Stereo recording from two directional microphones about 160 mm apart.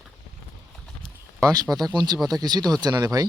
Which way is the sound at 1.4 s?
20° right (ahead or behind).